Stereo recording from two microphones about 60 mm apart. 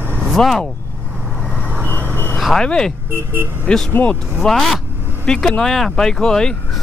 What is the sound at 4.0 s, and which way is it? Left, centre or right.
Speech, left.